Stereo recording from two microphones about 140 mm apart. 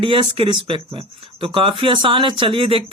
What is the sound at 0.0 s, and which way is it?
Speech, 40° right (ahead or behind).